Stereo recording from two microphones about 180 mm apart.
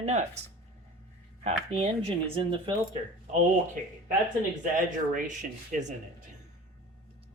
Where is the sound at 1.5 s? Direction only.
35° right (ahead or behind).